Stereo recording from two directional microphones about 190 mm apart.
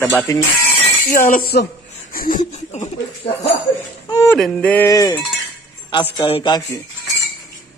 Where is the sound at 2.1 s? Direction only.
45° left (ahead or behind).